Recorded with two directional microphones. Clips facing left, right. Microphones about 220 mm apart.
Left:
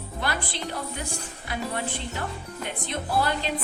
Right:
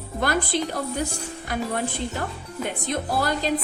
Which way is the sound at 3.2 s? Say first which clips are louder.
Even; 40° right (ahead or behind).